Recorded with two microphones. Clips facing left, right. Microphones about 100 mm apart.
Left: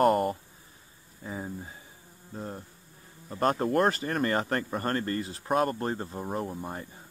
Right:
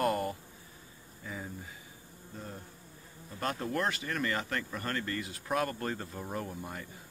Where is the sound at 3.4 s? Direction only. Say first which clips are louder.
Left 8 dB; 40° left (ahead or behind).